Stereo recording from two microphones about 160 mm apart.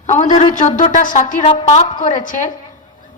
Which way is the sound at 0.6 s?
50° left (ahead or behind).